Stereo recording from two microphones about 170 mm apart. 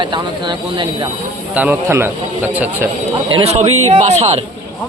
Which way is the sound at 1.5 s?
10° right (ahead or behind).